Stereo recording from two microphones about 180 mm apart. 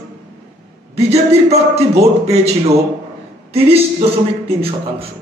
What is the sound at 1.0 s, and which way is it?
A man's voice, 35° right (ahead or behind).